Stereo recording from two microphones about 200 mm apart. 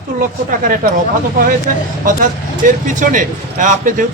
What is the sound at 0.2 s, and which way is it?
Speech, 45° right (ahead or behind).